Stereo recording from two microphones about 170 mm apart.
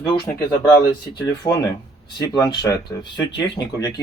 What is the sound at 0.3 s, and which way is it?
Speech, 10° left (ahead or behind).